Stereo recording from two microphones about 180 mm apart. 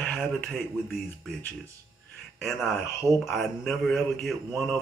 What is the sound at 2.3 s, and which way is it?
Speech, centre (ahead or behind).